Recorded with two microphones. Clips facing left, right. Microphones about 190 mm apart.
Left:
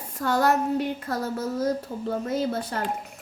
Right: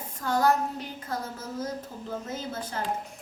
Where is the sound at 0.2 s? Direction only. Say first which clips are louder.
Left 2 dB; 70° left (ahead or behind).